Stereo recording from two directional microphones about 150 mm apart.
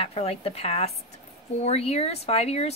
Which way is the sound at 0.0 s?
40° left (ahead or behind).